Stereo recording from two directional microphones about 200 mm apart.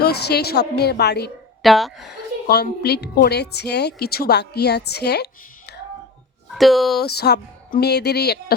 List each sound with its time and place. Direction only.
0.0 s a woman's voice: 55° left (ahead or behind)
1.6 s speech: centre (ahead or behind)
2.5 s a woman's voice: 55° left (ahead or behind)
6.5 s speech: centre (ahead or behind)
7.0 s speech: 55° left (ahead or behind)